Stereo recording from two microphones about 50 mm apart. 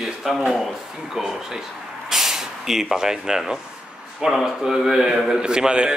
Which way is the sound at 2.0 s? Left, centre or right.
Centre.